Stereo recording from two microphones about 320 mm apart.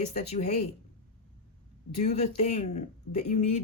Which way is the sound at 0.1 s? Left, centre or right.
Left.